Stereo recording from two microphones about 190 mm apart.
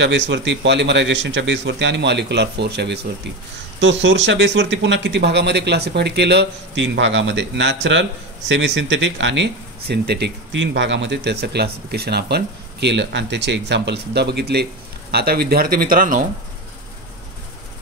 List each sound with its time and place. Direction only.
0.0 s a man's voice: 70° right (ahead or behind)
3.8 s speech: 70° right (ahead or behind); by 16.2 s 50° right (ahead or behind)